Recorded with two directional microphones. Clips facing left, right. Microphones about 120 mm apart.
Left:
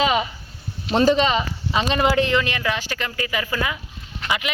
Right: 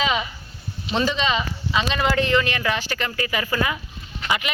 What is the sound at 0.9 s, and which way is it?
Speech, 45° left (ahead or behind).